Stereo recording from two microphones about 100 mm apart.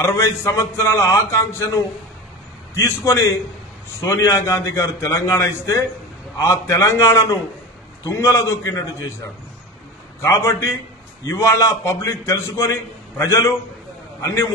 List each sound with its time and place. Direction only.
0.0 s a man's voice: 25° left (ahead or behind)
2.8 s a man's voice: 30° left (ahead or behind)